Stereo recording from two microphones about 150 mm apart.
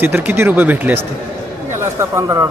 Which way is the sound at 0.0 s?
10° right (ahead or behind).